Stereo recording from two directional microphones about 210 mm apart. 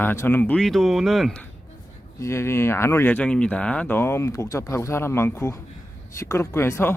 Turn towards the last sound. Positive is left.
turn(degrees=10)  # may be behind; listen again after turning